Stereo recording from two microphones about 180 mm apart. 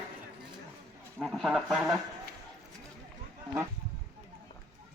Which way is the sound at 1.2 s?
Centre (ahead or behind).